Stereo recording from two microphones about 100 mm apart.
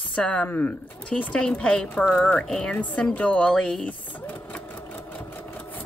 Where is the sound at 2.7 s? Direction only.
15° left (ahead or behind).